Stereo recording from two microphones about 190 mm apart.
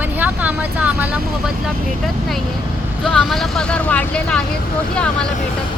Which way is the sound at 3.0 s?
Centre (ahead or behind).